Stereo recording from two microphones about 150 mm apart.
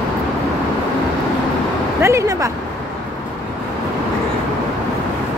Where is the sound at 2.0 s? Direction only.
20° right (ahead or behind).